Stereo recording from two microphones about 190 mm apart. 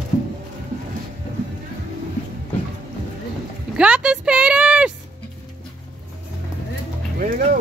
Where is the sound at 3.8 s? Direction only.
5° right (ahead or behind).